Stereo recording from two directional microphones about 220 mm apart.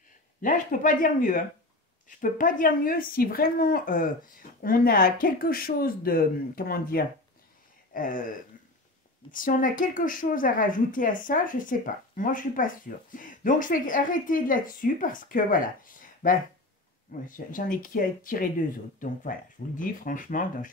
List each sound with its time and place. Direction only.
0.4 s speech: 35° left (ahead or behind)
7.9 s a sound: 40° left (ahead or behind)
9.3 s speech: 40° left (ahead or behind)